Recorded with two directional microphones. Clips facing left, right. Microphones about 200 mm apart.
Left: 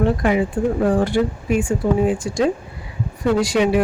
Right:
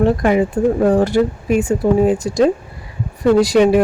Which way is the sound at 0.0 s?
45° right (ahead or behind).